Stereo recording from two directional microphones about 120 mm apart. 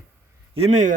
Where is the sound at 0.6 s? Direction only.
70° right (ahead or behind).